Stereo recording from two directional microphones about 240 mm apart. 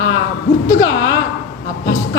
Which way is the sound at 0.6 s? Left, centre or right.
Centre.